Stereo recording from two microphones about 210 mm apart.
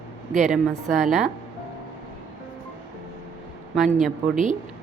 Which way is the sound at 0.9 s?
Centre (ahead or behind).